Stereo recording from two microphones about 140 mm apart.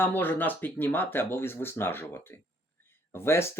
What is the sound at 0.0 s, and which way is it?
Speech, 15° left (ahead or behind).